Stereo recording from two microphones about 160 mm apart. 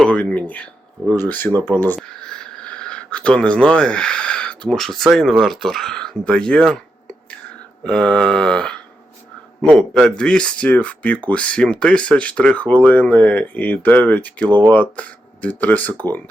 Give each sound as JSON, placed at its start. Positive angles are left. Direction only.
{"t": 0.0, "sound": "speech", "side_deg": 5}
{"t": 7.9, "sound": "mantra", "side_deg": 5}
{"t": 9.6, "sound": "speech", "side_deg": 5}